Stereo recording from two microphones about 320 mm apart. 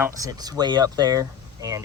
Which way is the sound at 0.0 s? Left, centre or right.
Centre.